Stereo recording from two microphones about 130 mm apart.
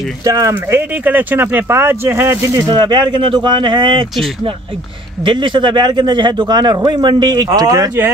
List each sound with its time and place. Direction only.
0.2 s speech: 25° right (ahead or behind)
2.7 s a man's voice: 35° right (ahead or behind)
5.2 s a man's voice: 40° right (ahead or behind)